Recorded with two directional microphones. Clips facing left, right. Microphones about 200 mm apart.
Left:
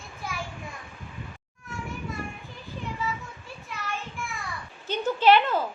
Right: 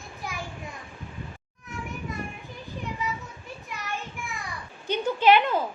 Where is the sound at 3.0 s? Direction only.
20° right (ahead or behind).